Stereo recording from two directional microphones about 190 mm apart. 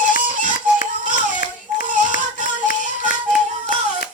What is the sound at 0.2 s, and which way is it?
Music, 45° right (ahead or behind).